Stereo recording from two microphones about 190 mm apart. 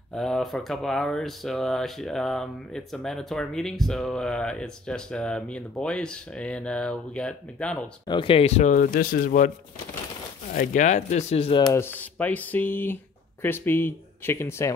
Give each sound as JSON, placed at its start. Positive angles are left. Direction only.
{"t": 0.1, "sound": "speech", "side_deg": 0}
{"t": 8.1, "sound": "speech", "side_deg": 25}
{"t": 10.5, "sound": "speech", "side_deg": 45}
{"t": 11.7, "sound": "speech", "side_deg": 10}